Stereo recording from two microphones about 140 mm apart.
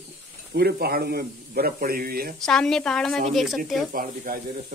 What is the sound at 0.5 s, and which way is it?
A man's voice, 90° right.